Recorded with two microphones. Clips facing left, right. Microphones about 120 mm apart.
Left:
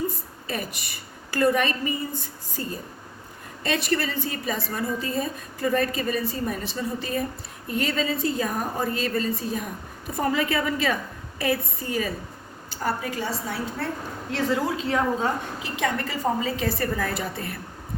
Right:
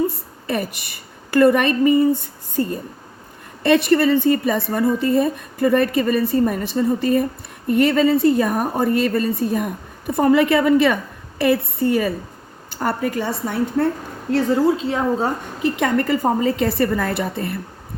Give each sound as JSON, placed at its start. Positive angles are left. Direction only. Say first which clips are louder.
{"t": 0.4, "sound": "a woman's voice", "louder": "right 8 dB", "side_deg": -60}
{"t": 14.3, "sound": "speech", "louder": "right 7 dB", "side_deg": -40}
{"t": 15.6, "sound": "speech", "louder": "right 10 dB", "side_deg": -55}